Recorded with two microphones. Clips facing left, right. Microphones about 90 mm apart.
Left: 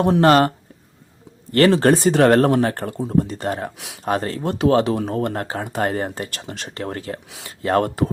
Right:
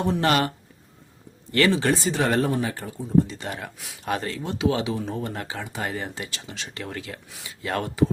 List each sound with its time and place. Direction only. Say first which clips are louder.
0.2 s speech: left 10 dB; 40° left (ahead or behind)
1.5 s speech: left 7 dB; 50° left (ahead or behind); by 3.1 s 65° left (ahead or behind)
3.2 s speech: left 8 dB; 45° left (ahead or behind)
3.8 s speech: left 4 dB; 80° left
4.0 s speech: left 6 dB; 40° left (ahead or behind)